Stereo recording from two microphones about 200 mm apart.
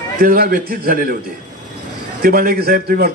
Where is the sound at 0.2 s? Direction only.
45° right (ahead or behind).